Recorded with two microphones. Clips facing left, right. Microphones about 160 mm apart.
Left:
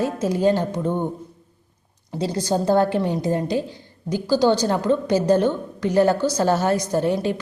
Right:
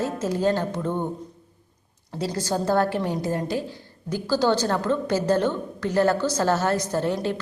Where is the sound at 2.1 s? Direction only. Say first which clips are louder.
Left 4 dB; 20° left (ahead or behind).